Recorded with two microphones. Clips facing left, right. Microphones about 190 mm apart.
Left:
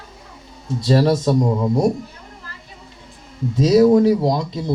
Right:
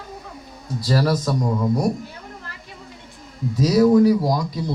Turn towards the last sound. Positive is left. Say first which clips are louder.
# left 2 dB
turn(degrees=25)  # may be behind; listen again after turning